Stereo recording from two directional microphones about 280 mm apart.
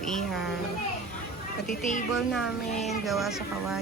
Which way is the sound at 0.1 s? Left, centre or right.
Centre.